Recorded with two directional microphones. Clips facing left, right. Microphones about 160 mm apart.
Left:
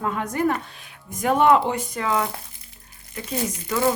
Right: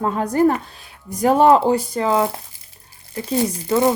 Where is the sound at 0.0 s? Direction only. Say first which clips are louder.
Right 7 dB; 35° right (ahead or behind).